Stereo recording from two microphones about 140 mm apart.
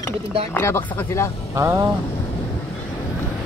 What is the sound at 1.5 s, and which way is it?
Speech, 25° right (ahead or behind).